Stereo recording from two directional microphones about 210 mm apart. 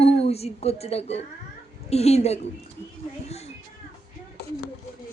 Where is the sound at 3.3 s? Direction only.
30° left (ahead or behind).